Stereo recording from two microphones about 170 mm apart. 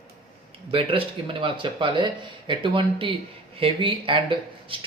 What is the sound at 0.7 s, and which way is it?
Speech, 30° right (ahead or behind).